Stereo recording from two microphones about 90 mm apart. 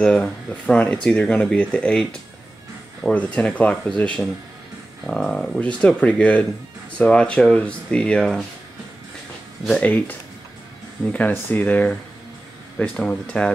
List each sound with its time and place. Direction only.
0.0 s speech: 10° left (ahead or behind)
3.3 s speech: 15° left (ahead or behind)
9.7 s speech: 15° left (ahead or behind)
11.1 s speech: 15° left (ahead or behind)